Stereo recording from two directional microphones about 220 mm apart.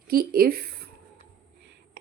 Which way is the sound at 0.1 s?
40° right (ahead or behind).